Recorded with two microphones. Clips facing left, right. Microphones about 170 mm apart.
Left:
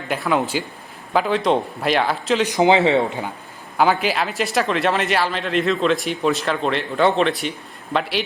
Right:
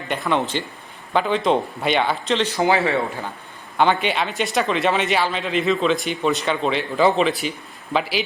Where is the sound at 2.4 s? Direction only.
15° left (ahead or behind).